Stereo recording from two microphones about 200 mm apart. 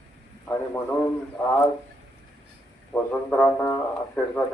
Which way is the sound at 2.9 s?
10° left (ahead or behind).